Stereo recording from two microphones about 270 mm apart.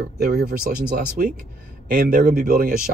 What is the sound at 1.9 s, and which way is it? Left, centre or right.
Speech, right.